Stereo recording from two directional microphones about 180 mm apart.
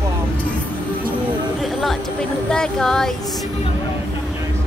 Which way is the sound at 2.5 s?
5° left (ahead or behind).